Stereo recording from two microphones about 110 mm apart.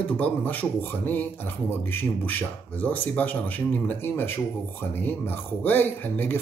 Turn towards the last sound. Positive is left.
turn(degrees=15)  # may be behind; listen again after turning